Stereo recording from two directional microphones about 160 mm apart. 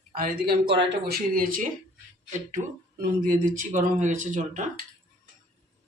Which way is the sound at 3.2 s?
55° right (ahead or behind).